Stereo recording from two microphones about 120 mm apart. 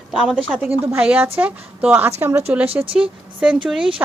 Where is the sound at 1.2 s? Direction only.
20° right (ahead or behind).